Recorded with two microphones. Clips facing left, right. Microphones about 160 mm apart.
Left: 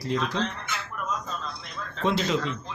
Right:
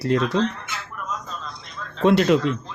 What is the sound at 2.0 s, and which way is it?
Speech, 65° right (ahead or behind).